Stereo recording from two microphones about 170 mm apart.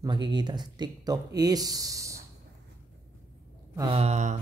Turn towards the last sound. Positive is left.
turn(degrees=-40)  # may be behind; listen again after turning